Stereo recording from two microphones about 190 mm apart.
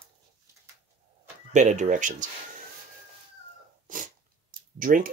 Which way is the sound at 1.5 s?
40° right (ahead or behind).